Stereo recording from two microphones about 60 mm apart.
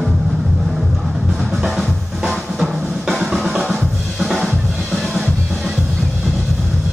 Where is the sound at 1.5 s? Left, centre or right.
Centre.